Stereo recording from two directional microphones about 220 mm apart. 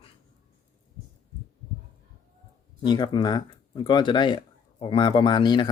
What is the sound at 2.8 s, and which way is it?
Speech, 20° left (ahead or behind).